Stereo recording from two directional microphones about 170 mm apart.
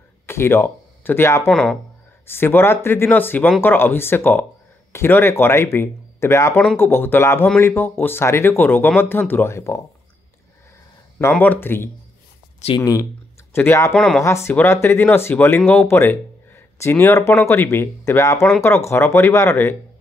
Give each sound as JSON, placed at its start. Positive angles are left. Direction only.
{"t": 0.3, "sound": "speech", "side_deg": 15}
{"t": 1.5, "sound": "speech", "side_deg": 5}
{"t": 11.1, "sound": "speech", "side_deg": 10}
{"t": 13.9, "sound": "speech", "side_deg": 0}
{"t": 14.2, "sound": "speech", "side_deg": 15}